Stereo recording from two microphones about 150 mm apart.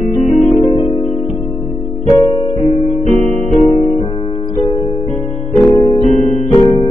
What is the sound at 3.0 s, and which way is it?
Music, 45° right (ahead or behind).